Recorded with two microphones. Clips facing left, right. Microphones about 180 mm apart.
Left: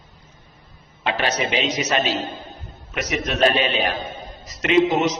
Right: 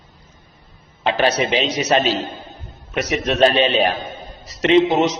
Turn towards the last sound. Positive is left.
turn(degrees=-30)  # may be behind; listen again after turning